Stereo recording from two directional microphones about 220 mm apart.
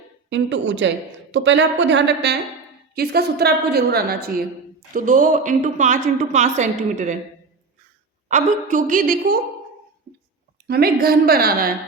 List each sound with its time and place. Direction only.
0.3 s a woman's voice: 55° right (ahead or behind); by 7.2 s 35° right (ahead or behind)
8.3 s a woman's voice: 35° right (ahead or behind)
10.7 s a woman's voice: 45° right (ahead or behind)